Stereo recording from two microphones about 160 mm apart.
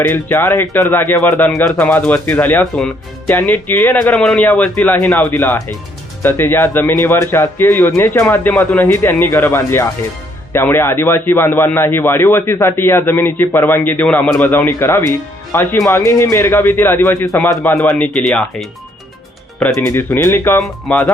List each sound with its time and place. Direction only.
0.1 s a man's voice: 15° left (ahead or behind)